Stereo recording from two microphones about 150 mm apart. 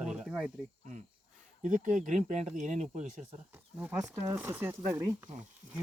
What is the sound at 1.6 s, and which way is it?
Speech, 55° right (ahead or behind).